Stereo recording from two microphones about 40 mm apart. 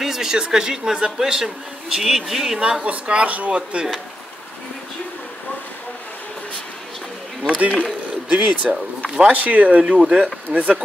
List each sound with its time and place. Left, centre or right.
0.0 s a man's voice: centre
2.8 s speech: right
7.4 s speech: right
8.3 s speech: right
9.9 s speech: right
10.5 s speech: right